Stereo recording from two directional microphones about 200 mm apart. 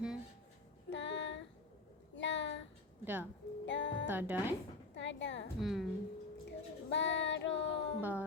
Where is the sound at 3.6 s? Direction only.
65° left (ahead or behind).